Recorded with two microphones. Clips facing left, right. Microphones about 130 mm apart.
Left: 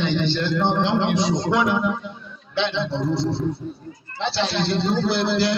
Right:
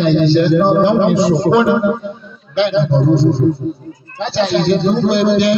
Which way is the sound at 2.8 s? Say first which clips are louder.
Right 10 dB; 60° right (ahead or behind).